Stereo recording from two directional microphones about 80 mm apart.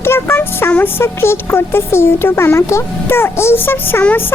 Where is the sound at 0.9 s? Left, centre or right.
Left.